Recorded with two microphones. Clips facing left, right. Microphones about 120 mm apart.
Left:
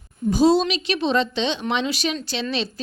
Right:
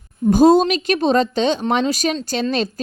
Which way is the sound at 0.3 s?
50° right (ahead or behind).